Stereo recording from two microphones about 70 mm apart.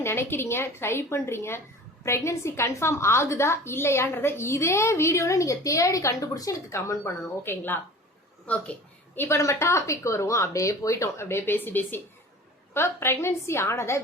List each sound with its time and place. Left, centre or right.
0.0 s a woman's voice: left
8.4 s speech: centre
9.1 s a woman's voice: left
9.4 s a woman's voice: left